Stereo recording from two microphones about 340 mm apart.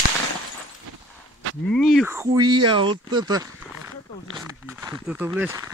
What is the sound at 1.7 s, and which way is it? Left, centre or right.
Speech, centre.